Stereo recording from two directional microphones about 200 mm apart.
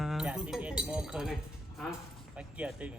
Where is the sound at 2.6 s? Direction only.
5° right (ahead or behind).